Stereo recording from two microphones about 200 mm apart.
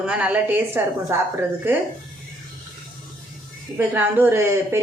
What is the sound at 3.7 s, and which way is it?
A woman's voice, 10° right (ahead or behind).